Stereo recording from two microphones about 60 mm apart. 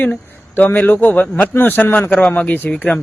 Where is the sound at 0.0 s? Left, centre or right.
Left.